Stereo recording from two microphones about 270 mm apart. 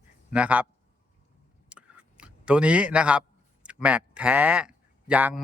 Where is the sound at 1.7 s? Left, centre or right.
Centre.